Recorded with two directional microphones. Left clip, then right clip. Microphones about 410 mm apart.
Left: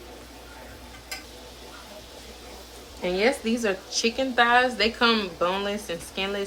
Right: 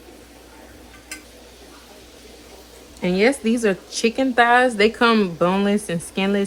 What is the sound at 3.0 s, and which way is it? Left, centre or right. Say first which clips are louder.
Speech: right 5 dB; centre.